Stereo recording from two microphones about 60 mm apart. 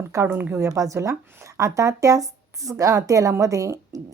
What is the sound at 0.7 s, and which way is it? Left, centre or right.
A woman's voice, right.